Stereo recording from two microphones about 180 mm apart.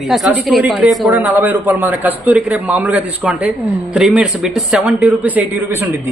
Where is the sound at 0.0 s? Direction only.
Centre (ahead or behind).